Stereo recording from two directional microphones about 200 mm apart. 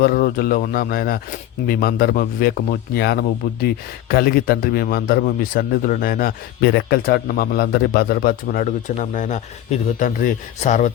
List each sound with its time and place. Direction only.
0.0 s a man's voice: 50° left (ahead or behind)